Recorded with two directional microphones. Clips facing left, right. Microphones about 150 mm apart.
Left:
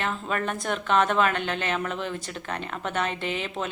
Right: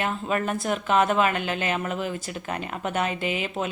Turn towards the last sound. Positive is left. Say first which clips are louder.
# right 2 dB
turn(degrees=-10)  # may be behind; listen again after turning